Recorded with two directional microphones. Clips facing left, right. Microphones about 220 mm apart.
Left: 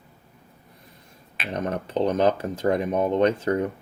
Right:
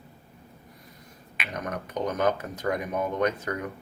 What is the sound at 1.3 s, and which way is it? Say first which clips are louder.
Speech: left 6 dB; 30° left (ahead or behind).